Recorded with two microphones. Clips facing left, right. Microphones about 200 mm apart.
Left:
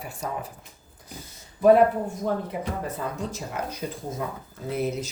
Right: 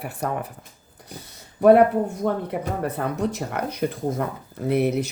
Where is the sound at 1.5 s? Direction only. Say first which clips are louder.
Right 3 dB; 65° right (ahead or behind).